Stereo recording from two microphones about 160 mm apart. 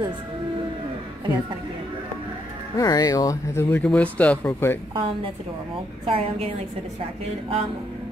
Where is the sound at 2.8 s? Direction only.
25° left (ahead or behind).